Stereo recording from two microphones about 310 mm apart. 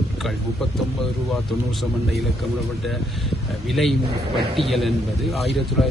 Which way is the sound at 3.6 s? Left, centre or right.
Centre.